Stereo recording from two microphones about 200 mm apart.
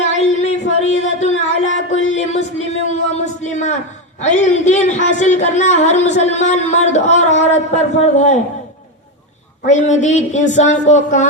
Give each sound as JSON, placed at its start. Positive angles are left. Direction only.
{"t": 0.0, "sound": "a sound", "side_deg": 35}
{"t": 4.2, "sound": "speech", "side_deg": 35}
{"t": 9.6, "sound": "speech", "side_deg": 35}